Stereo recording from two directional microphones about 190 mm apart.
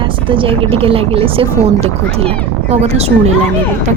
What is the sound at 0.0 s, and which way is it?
A woman's voice, 25° right (ahead or behind).